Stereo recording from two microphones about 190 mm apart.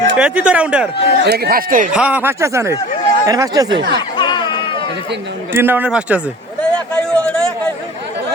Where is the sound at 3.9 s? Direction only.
25° left (ahead or behind).